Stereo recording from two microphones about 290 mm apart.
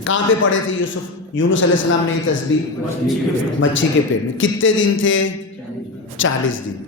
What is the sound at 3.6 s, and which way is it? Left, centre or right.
A man's voice, left.